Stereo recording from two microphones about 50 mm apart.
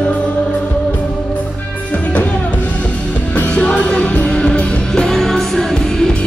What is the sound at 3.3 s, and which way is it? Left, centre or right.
Music, left.